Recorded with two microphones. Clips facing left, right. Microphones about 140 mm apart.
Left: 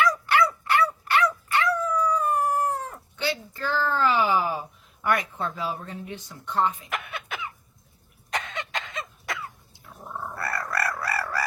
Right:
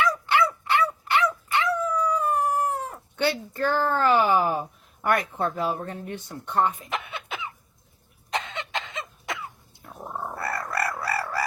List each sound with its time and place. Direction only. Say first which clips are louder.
0.0 s dog: left 1 dB; 20° right (ahead or behind)
1.9 s howl: even; 15° right (ahead or behind)
3.2 s a woman's voice: right 5 dB; 55° right (ahead or behind)
6.7 s a sound: right 1 dB; 25° right (ahead or behind)
8.3 s cough: right 1 dB; 25° right (ahead or behind)
10.3 s a sound: even; 20° right (ahead or behind)